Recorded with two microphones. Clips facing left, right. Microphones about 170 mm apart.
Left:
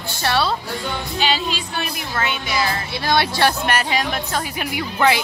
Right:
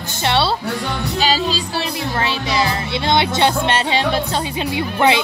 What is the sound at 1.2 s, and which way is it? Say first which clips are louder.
Speech: right 3 dB; 40° right (ahead or behind).